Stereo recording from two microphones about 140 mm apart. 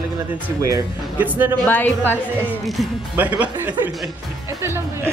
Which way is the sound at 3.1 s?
10° right (ahead or behind).